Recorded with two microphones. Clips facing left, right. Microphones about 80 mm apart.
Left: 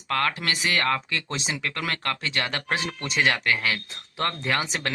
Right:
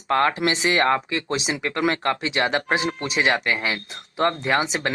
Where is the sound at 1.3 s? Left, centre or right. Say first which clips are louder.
Right 6 dB; centre.